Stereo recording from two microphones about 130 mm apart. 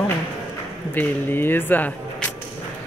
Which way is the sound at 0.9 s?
15° left (ahead or behind).